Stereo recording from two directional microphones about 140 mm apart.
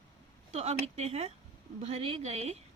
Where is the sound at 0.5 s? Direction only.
50° right (ahead or behind).